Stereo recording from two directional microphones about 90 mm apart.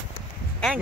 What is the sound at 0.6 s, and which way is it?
Speech, 5° left (ahead or behind).